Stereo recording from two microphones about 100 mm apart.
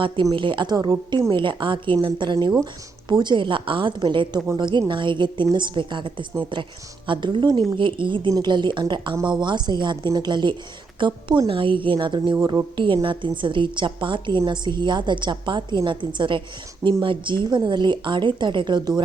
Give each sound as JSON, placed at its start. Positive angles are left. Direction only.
{"t": 0.3, "sound": "a woman's voice", "side_deg": -55}